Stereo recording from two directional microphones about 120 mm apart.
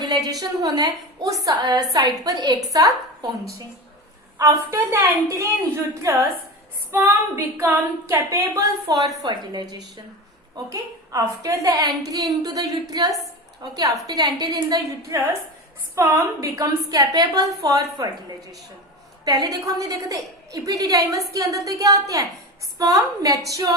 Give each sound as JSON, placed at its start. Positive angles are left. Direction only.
{"t": 0.0, "sound": "a woman's voice", "side_deg": -30}
{"t": 4.4, "sound": "a woman's voice", "side_deg": -25}
{"t": 7.5, "sound": "a woman's voice", "side_deg": -15}